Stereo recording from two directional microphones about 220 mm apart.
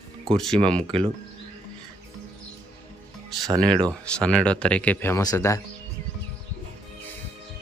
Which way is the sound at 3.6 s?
20° right (ahead or behind).